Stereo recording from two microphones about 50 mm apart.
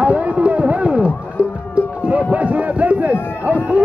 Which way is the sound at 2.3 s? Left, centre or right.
Right.